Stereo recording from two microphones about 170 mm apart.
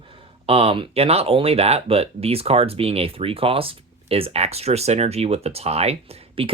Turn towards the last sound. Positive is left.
turn(degrees=-35)  # may be behind; listen again after turning